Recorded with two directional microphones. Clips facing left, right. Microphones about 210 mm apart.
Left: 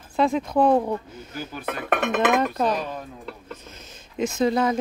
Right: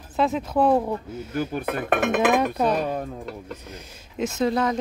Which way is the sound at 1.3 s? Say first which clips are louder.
Right 8 dB; 55° right (ahead or behind).